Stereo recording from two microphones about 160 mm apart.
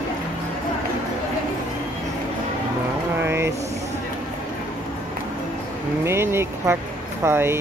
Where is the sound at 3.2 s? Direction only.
15° right (ahead or behind).